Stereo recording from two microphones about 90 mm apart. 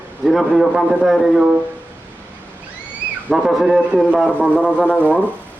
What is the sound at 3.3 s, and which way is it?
Speech, 5° right (ahead or behind).